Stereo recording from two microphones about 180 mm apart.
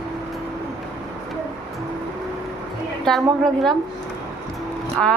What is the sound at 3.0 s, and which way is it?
Speech, centre (ahead or behind).